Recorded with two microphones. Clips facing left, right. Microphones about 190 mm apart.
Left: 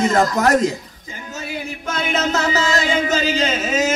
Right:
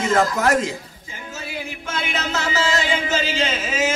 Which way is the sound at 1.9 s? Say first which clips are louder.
Left 6 dB; 40° left (ahead or behind).